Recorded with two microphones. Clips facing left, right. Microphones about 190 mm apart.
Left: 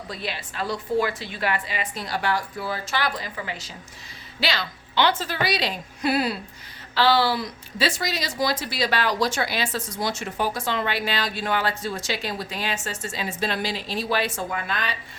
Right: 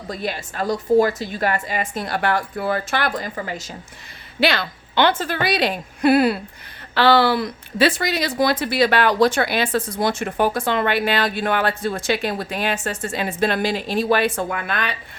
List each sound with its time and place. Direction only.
0.1 s a woman's voice: 45° right (ahead or behind)
4.4 s a woman's voice: 55° right (ahead or behind)